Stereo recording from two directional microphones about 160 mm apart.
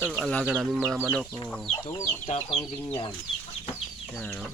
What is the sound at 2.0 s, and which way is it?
Speech, 40° left (ahead or behind).